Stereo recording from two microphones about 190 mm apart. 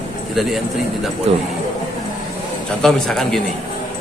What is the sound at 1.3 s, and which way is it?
Speech, 30° right (ahead or behind).